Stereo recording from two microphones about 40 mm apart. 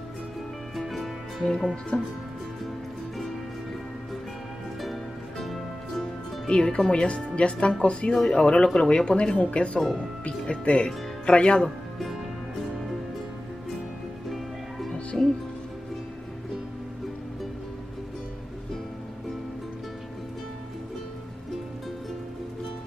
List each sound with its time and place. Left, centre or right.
0.7 s music: centre
1.4 s speech: centre
1.9 s a woman's voice: left
5.4 s music: centre
6.4 s a woman's voice: left
15.1 s music: centre